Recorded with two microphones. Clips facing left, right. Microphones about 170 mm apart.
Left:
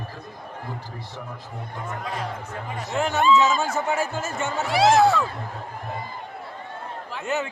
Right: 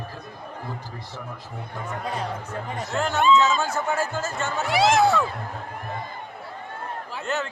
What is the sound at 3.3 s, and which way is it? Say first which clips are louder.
Speech: even; 20° left (ahead or behind).